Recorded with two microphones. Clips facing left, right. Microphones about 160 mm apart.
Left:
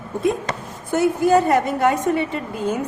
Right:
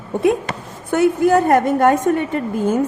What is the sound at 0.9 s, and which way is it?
A woman's voice, 60° right (ahead or behind).